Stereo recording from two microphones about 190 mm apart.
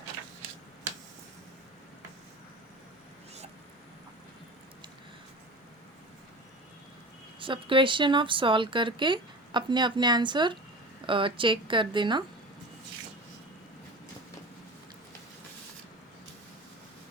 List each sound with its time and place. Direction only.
7.3 s speech: 25° right (ahead or behind)